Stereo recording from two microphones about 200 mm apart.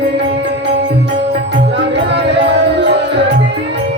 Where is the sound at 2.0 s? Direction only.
60° right (ahead or behind).